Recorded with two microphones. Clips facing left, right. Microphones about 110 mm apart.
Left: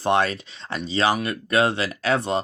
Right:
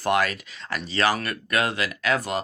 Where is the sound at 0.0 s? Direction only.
25° left (ahead or behind).